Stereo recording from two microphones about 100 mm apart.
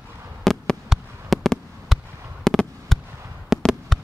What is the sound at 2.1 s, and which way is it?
Fireworks, 30° right (ahead or behind).